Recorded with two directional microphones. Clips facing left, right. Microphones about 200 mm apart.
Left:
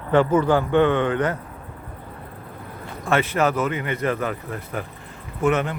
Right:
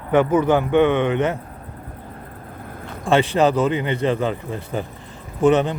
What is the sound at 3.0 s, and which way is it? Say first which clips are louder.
Speech: right 4 dB; 30° right (ahead or behind).